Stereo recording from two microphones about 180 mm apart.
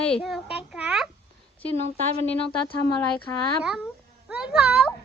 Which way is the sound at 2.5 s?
25° left (ahead or behind).